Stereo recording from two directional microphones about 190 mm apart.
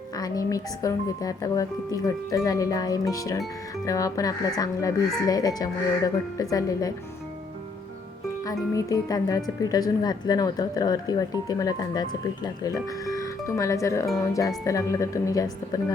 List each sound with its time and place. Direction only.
0.2 s speech: 20° left (ahead or behind)
8.4 s speech: 20° left (ahead or behind)